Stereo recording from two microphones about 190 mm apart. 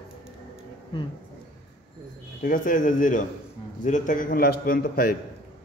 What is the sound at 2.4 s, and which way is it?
Speech, 45° left (ahead or behind).